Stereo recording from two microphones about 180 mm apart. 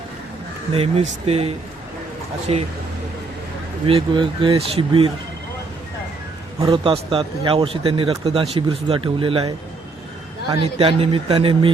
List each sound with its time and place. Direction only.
0.7 s speech: 35° right (ahead or behind)
3.8 s speech: 30° right (ahead or behind)
6.6 s speech: 30° right (ahead or behind)
10.5 s speech: 30° right (ahead or behind)